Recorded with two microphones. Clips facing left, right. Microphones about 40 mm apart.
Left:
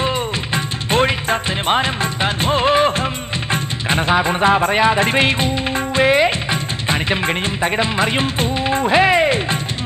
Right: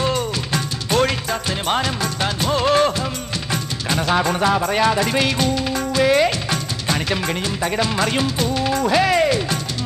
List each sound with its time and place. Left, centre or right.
0.0 s music: left
4.1 s speech: left
8.5 s music: left